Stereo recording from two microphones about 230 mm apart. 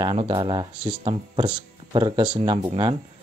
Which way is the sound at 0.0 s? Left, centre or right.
Right.